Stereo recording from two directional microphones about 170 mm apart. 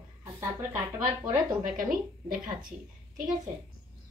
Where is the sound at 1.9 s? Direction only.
55° right (ahead or behind).